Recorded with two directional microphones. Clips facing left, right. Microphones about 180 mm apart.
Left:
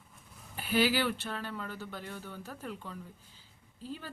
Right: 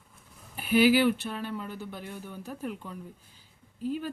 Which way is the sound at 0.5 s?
10° right (ahead or behind).